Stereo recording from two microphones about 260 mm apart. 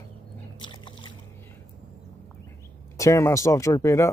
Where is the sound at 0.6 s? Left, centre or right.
Centre.